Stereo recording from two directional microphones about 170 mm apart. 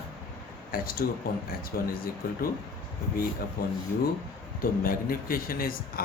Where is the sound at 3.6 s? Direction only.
60° left (ahead or behind).